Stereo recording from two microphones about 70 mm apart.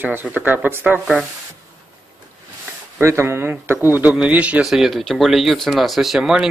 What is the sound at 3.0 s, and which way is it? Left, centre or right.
Speech, right.